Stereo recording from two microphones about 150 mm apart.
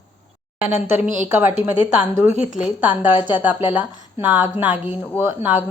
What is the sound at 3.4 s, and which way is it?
A woman's voice, 10° right (ahead or behind).